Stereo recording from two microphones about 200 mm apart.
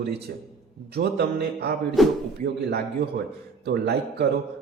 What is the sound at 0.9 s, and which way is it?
Music, 55° right (ahead or behind).